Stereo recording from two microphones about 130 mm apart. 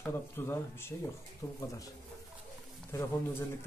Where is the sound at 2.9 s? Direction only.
20° left (ahead or behind).